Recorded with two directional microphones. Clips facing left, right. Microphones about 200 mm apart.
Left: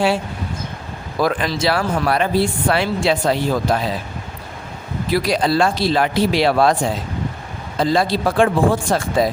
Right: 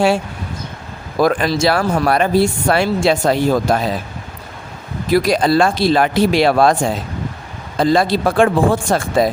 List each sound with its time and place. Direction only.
1.2 s speech: 45° right (ahead or behind)
5.1 s speech: 45° right (ahead or behind)